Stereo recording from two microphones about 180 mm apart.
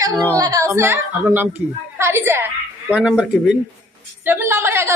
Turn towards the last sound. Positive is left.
turn(degrees=-15)  # may be behind; listen again after turning